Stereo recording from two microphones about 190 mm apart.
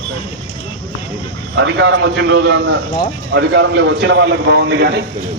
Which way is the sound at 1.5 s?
75° right (ahead or behind).